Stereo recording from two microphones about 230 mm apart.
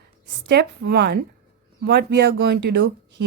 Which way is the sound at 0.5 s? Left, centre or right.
Right.